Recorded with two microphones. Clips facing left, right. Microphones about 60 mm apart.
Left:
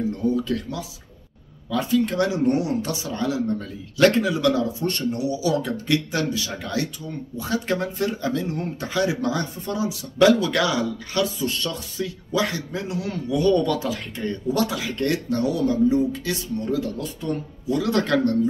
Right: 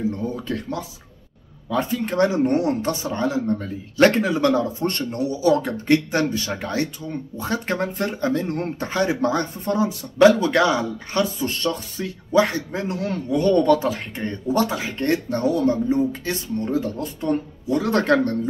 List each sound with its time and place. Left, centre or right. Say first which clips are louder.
0.5 s speech: even; right
10.1 s speech: right 3 dB; right